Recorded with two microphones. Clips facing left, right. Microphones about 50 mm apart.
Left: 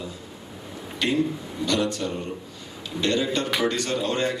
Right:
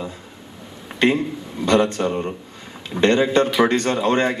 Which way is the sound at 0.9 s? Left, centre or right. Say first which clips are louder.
Right 5 dB; right.